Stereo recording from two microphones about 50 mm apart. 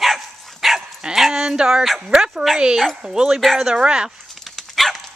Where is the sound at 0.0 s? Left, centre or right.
Centre.